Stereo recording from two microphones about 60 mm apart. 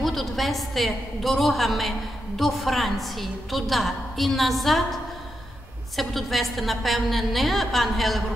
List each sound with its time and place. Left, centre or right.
0.0 s a woman's voice: centre
5.9 s a woman's voice: centre